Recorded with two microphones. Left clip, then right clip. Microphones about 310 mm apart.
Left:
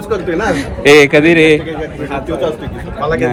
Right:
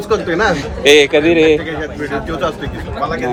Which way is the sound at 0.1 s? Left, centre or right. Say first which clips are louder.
Right 1 dB; right.